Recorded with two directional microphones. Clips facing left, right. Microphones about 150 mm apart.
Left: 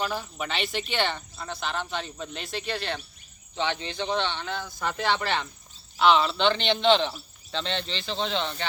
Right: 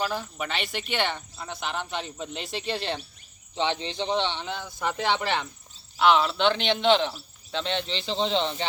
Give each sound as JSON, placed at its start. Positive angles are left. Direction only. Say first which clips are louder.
{"t": 0.3, "sound": "speech", "louder": "left 1 dB", "side_deg": -5}
{"t": 6.0, "sound": "speech", "louder": "even", "side_deg": -5}